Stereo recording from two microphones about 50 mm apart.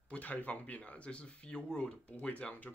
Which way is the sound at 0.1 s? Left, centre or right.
Left.